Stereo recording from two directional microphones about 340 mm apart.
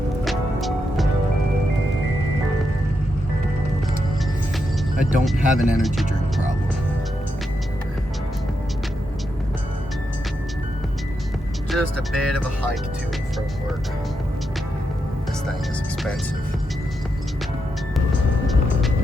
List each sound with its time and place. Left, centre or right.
0.3 s music: centre
4.9 s speech: centre
11.7 s speech: centre